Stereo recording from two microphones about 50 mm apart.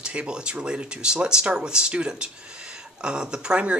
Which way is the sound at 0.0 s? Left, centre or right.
Right.